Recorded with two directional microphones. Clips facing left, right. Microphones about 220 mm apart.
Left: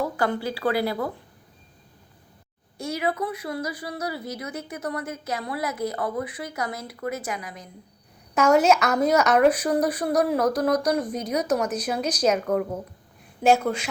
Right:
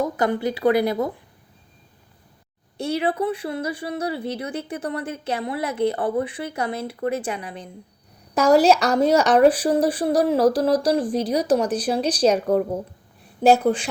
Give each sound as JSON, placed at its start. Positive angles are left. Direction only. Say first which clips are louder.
{"t": 0.0, "sound": "speech", "louder": "right 4 dB", "side_deg": -20}
{"t": 2.7, "sound": "speech", "louder": "right 4 dB", "side_deg": -30}